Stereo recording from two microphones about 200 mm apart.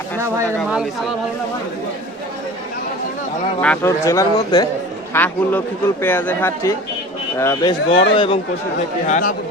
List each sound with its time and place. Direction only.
3.6 s a man's voice: 10° left (ahead or behind); by 8.4 s 25° left (ahead or behind)
9.0 s speech: 40° left (ahead or behind)